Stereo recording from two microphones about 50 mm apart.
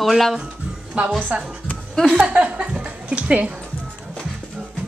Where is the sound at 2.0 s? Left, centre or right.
Centre.